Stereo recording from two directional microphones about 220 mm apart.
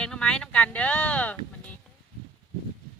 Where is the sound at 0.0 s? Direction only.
5° left (ahead or behind).